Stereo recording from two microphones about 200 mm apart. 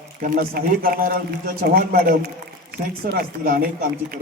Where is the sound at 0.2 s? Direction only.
50° right (ahead or behind).